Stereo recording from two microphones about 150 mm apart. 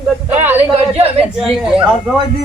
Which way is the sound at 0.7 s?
45° right (ahead or behind).